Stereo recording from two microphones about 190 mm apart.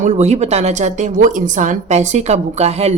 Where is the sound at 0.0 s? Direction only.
35° right (ahead or behind).